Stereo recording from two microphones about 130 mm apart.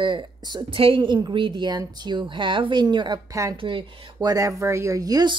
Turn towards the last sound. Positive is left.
turn(degrees=-30)  # may be behind; listen again after turning